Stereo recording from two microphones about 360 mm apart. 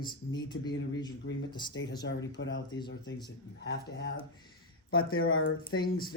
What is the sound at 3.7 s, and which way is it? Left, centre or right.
A man's voice, left.